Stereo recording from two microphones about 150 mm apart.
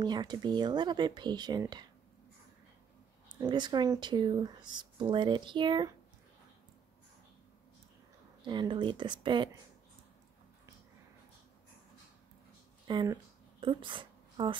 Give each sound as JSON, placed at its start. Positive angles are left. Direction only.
{"t": 0.0, "sound": "speech", "side_deg": -30}
{"t": 3.3, "sound": "speech", "side_deg": -30}
{"t": 8.5, "sound": "speech", "side_deg": -30}
{"t": 12.8, "sound": "speech", "side_deg": -25}